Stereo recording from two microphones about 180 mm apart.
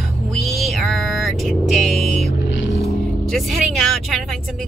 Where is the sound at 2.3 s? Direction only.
90° left.